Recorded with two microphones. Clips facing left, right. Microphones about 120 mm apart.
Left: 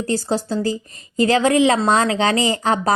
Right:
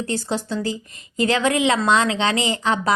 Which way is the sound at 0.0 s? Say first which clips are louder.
Left 4 dB; 40° left (ahead or behind).